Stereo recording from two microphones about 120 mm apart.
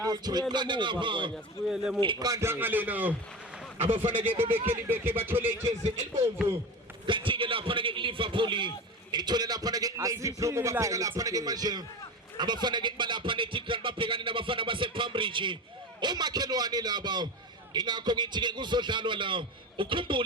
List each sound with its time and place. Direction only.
0.0 s a man's voice: 35° right (ahead or behind)
2.2 s speech: 25° right (ahead or behind)
3.8 s speech: 50° right (ahead or behind)
4.1 s speech: 15° right (ahead or behind)
7.1 s a man's voice: 45° right (ahead or behind)